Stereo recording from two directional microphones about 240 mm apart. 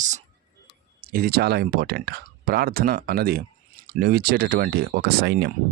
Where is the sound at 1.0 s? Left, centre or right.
Right.